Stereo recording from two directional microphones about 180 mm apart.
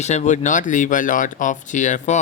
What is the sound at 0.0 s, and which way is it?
Speech, 40° left (ahead or behind).